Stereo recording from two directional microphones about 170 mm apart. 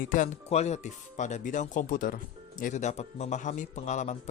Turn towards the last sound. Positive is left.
turn(degrees=45)  # may be behind; listen again after turning